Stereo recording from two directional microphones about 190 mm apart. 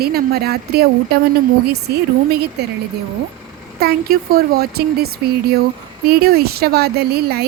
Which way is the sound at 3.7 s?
55° right (ahead or behind).